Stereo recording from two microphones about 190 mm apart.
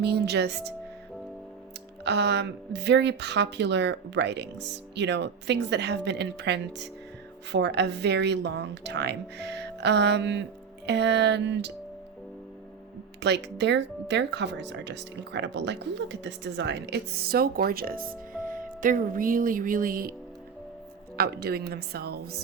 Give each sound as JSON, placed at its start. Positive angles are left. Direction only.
{"t": 0.0, "sound": "speech", "side_deg": -60}
{"t": 2.0, "sound": "speech", "side_deg": -65}
{"t": 13.1, "sound": "speech", "side_deg": -65}
{"t": 18.4, "sound": "music", "side_deg": -45}
{"t": 21.2, "sound": "speech", "side_deg": -55}